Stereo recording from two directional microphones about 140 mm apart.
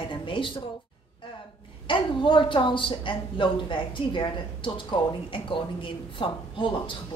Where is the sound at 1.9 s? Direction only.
35° left (ahead or behind).